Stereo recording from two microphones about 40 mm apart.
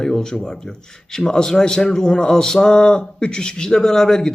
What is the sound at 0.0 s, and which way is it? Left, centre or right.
Speech, centre.